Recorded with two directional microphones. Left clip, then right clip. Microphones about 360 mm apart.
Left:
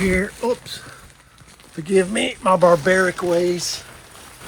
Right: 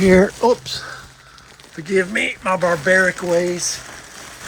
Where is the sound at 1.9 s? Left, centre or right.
Centre.